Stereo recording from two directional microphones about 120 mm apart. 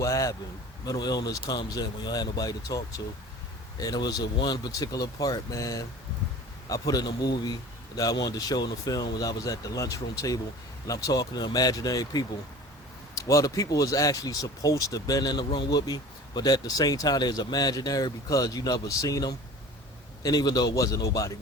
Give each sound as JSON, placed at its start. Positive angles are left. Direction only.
{"t": 0.0, "sound": "speech", "side_deg": 25}